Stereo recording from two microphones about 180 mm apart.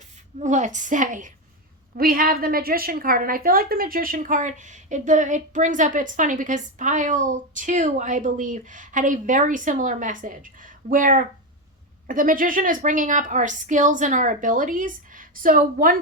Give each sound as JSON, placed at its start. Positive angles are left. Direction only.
{"t": 0.3, "sound": "a woman's voice", "side_deg": -40}